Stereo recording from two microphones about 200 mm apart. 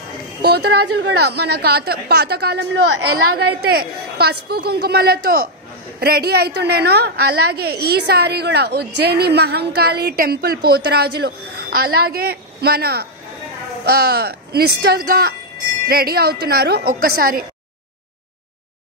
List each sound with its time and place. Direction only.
0.5 s a woman's voice: 55° right (ahead or behind)
3.6 s a woman's voice: 50° right (ahead or behind)